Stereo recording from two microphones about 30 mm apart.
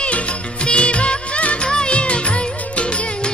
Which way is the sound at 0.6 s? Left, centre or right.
Left.